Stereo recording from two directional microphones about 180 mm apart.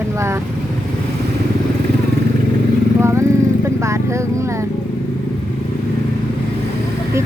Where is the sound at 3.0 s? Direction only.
15° right (ahead or behind).